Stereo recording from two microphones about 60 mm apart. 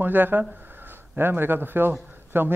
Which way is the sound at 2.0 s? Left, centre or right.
Right.